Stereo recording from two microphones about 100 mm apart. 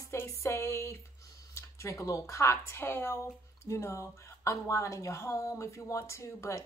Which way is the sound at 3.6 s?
30° left (ahead or behind).